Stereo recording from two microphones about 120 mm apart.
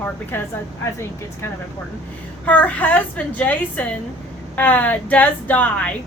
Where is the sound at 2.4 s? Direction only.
15° left (ahead or behind).